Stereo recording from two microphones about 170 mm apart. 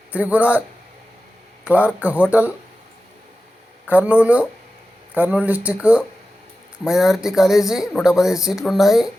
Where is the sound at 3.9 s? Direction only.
10° right (ahead or behind).